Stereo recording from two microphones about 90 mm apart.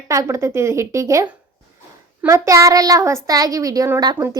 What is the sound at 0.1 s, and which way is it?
A woman's voice, 35° right (ahead or behind).